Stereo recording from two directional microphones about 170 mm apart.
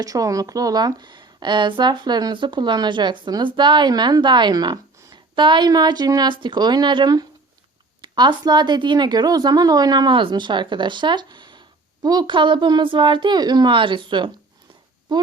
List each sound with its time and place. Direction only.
0.0 s a woman's voice: 20° right (ahead or behind)